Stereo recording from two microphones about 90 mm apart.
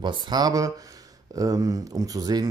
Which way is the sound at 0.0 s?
55° right (ahead or behind).